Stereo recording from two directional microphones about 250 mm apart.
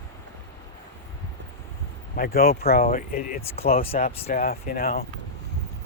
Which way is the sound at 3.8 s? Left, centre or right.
Left.